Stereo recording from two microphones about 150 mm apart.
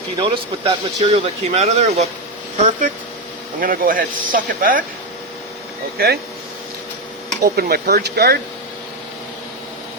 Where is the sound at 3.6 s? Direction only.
70° right (ahead or behind).